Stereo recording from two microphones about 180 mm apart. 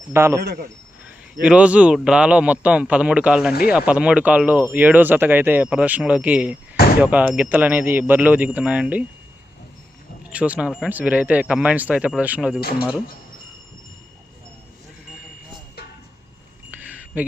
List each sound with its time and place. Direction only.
0.1 s speech: 15° right (ahead or behind)
0.4 s a man's voice: 65° right (ahead or behind)
1.4 s speech: 5° right (ahead or behind)
10.3 s speech: 5° right (ahead or behind)
16.7 s a sound: 10° right (ahead or behind)